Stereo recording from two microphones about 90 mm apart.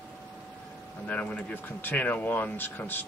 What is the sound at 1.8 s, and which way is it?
Speech, 20° left (ahead or behind).